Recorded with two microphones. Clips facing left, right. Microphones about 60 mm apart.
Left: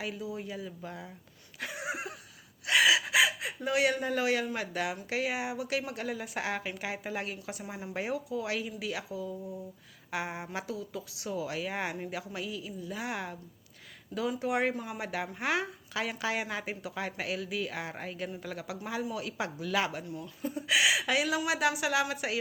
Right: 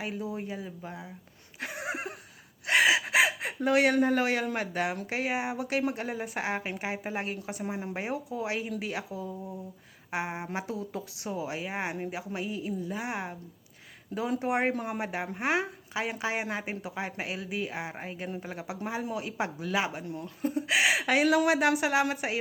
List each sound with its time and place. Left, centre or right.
0.0 s speech: right
0.8 s speech: centre
1.5 s a sound: right
3.6 s speech: right